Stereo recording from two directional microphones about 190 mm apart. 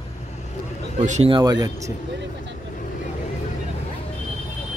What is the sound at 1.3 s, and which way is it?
Speech, 20° right (ahead or behind).